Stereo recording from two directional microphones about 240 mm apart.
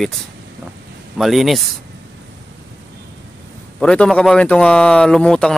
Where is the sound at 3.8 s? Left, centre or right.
Centre.